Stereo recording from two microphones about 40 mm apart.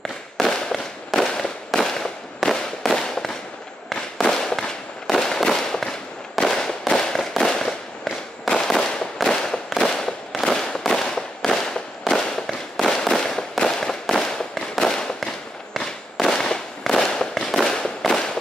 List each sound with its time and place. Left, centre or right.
0.5 s fireworks: centre